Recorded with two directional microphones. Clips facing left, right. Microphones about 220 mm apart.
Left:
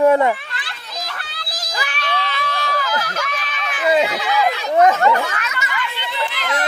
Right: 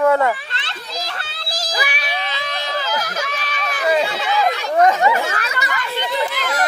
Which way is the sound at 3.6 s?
40° right (ahead or behind).